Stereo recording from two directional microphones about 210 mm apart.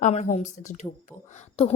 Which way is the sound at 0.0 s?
35° left (ahead or behind).